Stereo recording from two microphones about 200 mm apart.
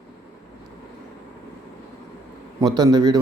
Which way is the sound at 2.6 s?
20° right (ahead or behind).